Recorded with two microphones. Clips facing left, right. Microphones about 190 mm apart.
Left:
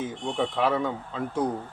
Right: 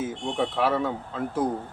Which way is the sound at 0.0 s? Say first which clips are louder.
Right 1 dB; 5° right (ahead or behind).